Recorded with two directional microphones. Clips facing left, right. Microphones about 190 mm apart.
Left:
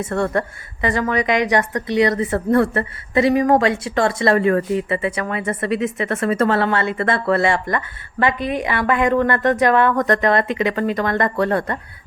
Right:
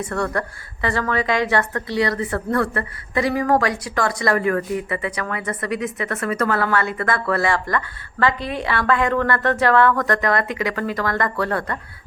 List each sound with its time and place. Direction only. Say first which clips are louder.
0.0 s a woman's voice: left 3 dB; 25° left (ahead or behind)